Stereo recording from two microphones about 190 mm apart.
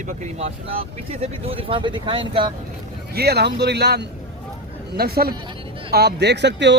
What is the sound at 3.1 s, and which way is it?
Speech, 55° right (ahead or behind).